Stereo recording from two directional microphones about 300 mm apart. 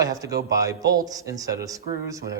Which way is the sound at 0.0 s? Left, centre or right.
Centre.